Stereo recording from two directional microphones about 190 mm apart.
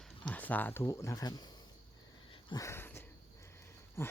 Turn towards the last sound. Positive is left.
turn(degrees=15)  # may be behind; listen again after turning